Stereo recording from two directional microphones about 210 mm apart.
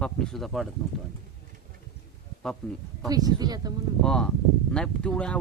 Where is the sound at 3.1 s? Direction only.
20° right (ahead or behind).